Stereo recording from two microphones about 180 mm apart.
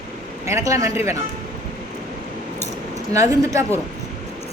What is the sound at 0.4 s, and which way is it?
Speech, 15° right (ahead or behind).